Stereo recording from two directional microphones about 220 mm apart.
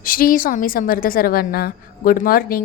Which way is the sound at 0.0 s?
40° left (ahead or behind).